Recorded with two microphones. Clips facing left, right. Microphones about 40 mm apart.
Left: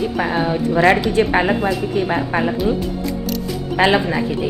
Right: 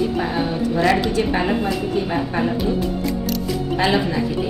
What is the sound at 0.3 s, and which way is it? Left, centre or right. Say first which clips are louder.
A woman's voice: left 3 dB; left.